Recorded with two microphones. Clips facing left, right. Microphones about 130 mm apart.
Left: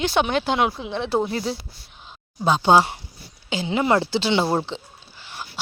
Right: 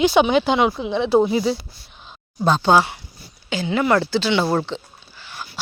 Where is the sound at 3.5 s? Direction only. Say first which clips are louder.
Right 2 dB; 25° left (ahead or behind).